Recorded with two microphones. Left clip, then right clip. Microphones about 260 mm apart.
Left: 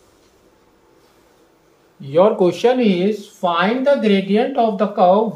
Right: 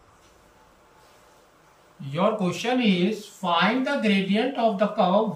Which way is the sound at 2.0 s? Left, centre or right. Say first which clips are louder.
Left 11 dB; centre.